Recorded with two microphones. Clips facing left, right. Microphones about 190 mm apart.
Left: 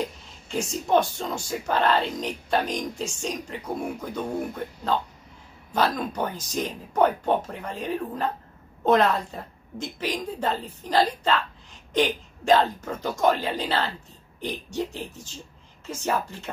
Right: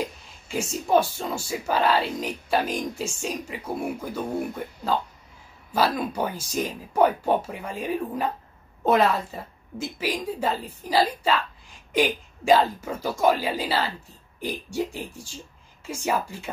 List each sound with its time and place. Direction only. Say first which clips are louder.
0.0 s speech: even; 5° right (ahead or behind)
5.9 s speech: right 1 dB; 10° right (ahead or behind)